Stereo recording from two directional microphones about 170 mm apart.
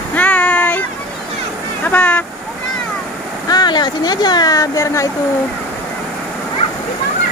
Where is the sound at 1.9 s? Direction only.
10° left (ahead or behind).